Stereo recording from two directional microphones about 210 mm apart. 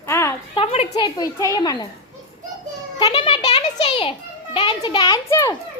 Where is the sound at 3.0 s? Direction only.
25° left (ahead or behind).